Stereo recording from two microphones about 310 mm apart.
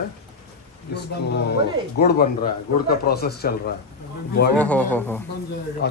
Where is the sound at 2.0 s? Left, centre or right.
Left.